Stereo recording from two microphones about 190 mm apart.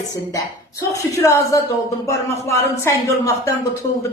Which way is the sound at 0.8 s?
15° left (ahead or behind).